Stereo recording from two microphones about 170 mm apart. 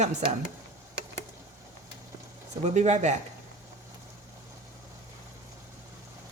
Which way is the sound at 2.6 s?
40° right (ahead or behind).